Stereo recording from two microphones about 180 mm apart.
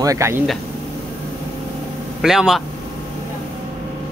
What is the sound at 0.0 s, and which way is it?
Speech, 15° right (ahead or behind).